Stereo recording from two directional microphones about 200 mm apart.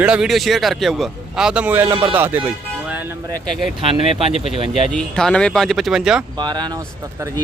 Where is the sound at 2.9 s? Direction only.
10° right (ahead or behind).